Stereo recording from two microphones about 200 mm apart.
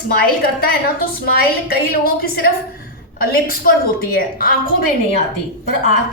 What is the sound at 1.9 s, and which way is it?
A woman's voice, 50° left (ahead or behind).